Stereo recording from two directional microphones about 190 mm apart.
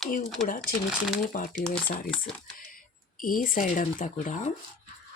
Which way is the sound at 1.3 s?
50° left (ahead or behind).